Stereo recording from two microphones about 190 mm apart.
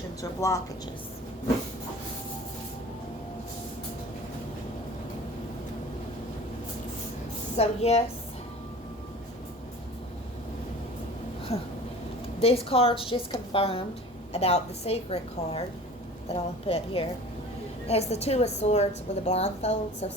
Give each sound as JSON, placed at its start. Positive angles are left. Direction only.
{"t": 0.2, "sound": "speech", "side_deg": 15}
{"t": 7.5, "sound": "a woman's voice", "side_deg": 35}
{"t": 11.5, "sound": "a woman's voice", "side_deg": 30}